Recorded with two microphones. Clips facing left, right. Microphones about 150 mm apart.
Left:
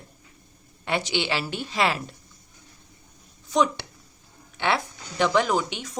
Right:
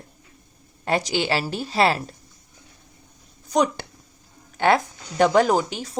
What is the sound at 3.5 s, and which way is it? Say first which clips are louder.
Speech: right 2 dB; 45° right (ahead or behind).